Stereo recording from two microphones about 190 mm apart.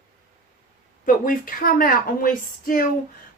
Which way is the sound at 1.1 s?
45° left (ahead or behind).